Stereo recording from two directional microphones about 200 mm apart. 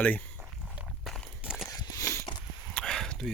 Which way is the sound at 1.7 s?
15° left (ahead or behind).